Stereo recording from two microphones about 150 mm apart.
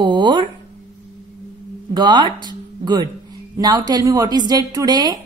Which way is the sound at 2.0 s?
30° right (ahead or behind).